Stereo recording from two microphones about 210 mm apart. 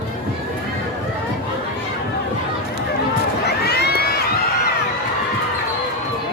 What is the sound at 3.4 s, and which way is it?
Crowd, 50° left (ahead or behind).